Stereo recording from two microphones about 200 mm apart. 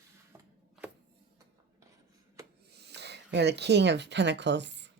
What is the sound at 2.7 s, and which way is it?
Speech, 55° right (ahead or behind).